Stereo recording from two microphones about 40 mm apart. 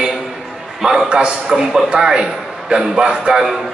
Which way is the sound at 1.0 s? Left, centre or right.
Right.